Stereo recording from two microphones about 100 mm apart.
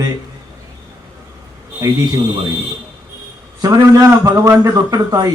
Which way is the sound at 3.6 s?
35° right (ahead or behind).